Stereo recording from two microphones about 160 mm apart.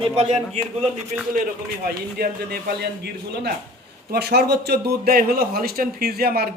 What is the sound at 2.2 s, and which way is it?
Speech, 75° right (ahead or behind).